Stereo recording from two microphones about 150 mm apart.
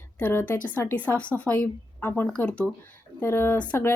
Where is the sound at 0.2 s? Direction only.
15° left (ahead or behind).